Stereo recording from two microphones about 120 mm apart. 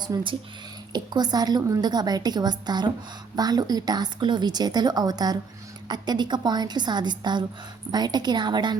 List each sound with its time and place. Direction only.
0.1 s a woman's voice: 30° right (ahead or behind)